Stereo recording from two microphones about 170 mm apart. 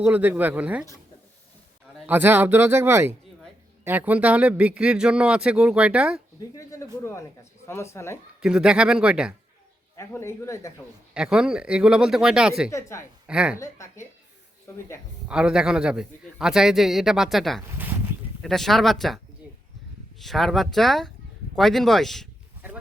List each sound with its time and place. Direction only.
0.0 s speech: 10° right (ahead or behind)
2.0 s speech: 10° right (ahead or behind)
6.6 s speech: 20° left (ahead or behind)
8.4 s a man's voice: 5° right (ahead or behind)
9.9 s speech: 15° left (ahead or behind)
11.1 s a man's voice: 5° right (ahead or behind)
12.7 s speech: 15° left (ahead or behind)
13.2 s speech: 5° right (ahead or behind)
13.6 s speech: 15° left (ahead or behind)
15.3 s a man's voice: 5° right (ahead or behind)